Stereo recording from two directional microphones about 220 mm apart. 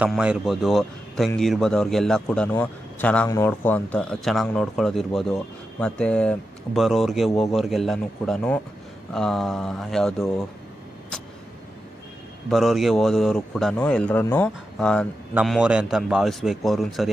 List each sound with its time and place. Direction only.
0.0 s a man's voice: 5° right (ahead or behind)
12.4 s a man's voice: centre (ahead or behind)